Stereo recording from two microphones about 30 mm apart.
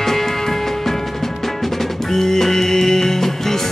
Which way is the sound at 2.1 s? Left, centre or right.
Centre.